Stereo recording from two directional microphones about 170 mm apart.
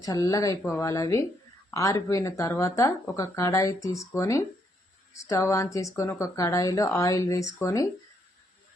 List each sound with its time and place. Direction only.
0.0 s speech: 20° left (ahead or behind)